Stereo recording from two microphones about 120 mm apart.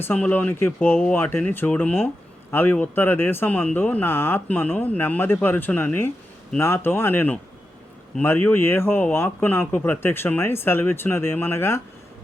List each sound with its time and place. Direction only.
0.0 s speech: 15° left (ahead or behind)